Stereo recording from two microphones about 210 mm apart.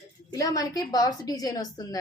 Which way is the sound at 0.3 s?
15° left (ahead or behind).